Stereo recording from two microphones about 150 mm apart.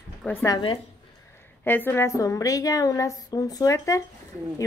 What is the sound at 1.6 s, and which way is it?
A woman's voice, 15° left (ahead or behind).